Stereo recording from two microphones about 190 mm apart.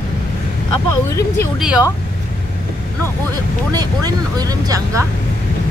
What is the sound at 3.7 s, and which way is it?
Speech, 20° right (ahead or behind).